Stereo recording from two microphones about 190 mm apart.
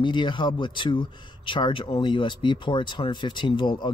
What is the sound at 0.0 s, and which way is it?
Speech, 25° left (ahead or behind).